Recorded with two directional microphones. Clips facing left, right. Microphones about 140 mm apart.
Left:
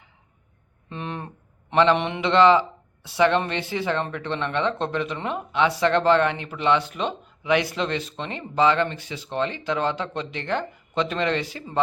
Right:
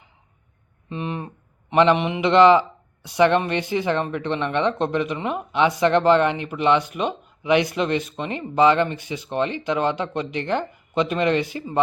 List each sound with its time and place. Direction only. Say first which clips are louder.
0.9 s a sound: right 4 dB; 5° right (ahead or behind)
1.7 s a man's voice: right 2 dB; 15° right (ahead or behind)
2.0 s a man's voice: right 3 dB; 5° right (ahead or behind)
2.2 s speech: right 3 dB; 15° right (ahead or behind)